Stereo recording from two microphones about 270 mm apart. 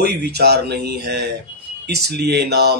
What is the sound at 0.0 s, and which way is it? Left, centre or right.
Speech, right.